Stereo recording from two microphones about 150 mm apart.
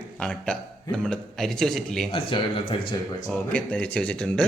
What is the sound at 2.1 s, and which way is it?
Speech, 35° left (ahead or behind).